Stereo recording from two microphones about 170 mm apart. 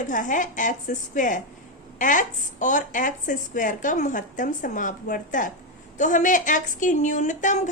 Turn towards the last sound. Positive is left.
turn(degrees=45)  # may be behind; listen again after turning